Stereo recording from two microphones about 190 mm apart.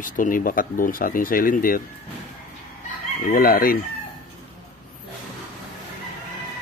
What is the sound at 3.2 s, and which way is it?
Speech, 50° left (ahead or behind).